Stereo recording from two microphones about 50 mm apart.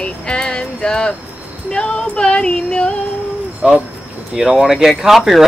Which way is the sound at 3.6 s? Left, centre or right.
Centre.